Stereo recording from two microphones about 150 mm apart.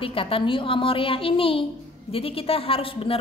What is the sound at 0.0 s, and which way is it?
A woman's voice, 35° left (ahead or behind).